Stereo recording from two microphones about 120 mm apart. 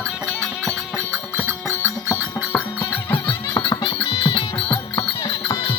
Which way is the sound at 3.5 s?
45° left (ahead or behind).